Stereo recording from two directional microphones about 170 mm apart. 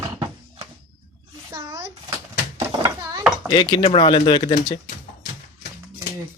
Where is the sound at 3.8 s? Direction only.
35° left (ahead or behind).